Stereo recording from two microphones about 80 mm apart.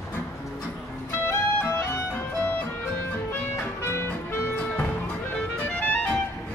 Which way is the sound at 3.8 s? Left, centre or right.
Left.